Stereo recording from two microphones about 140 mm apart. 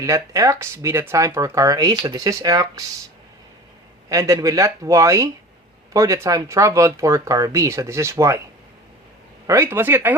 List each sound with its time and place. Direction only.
0.0 s speech: 25° right (ahead or behind)
4.1 s speech: 25° right (ahead or behind)
9.5 s speech: 20° right (ahead or behind)